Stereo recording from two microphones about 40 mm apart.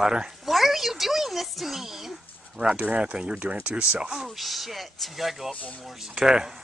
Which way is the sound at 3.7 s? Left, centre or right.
Right.